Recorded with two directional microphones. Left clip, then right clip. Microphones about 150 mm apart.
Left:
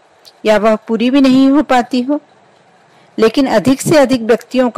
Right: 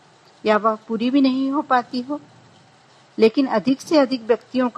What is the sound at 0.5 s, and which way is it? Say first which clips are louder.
Speech: left 8 dB; 40° left (ahead or behind).